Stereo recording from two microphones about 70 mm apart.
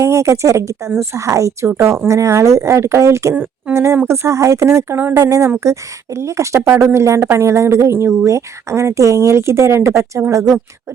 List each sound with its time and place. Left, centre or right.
0.0 s a woman's voice: right
3.3 s speech: right
3.8 s a woman's voice: right